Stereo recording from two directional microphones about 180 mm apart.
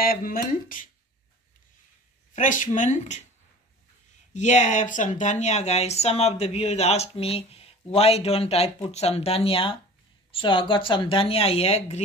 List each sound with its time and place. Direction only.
0.0 s speech: 55° left (ahead or behind)
2.3 s speech: 45° left (ahead or behind)
4.3 s speech: 40° left (ahead or behind)